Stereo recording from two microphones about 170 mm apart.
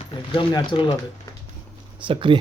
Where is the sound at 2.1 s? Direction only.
30° right (ahead or behind).